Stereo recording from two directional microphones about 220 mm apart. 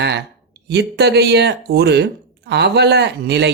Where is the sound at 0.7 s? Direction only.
50° right (ahead or behind).